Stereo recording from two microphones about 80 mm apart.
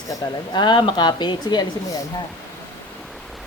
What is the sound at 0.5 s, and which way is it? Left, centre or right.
A woman's voice, left.